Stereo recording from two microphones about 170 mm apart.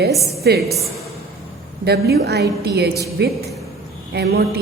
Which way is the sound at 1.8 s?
70° right (ahead or behind).